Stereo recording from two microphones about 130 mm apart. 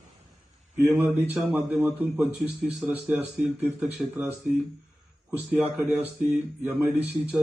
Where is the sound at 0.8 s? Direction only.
15° right (ahead or behind).